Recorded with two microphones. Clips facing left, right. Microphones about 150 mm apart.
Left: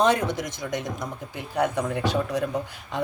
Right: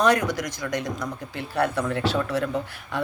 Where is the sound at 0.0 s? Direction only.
25° left (ahead or behind).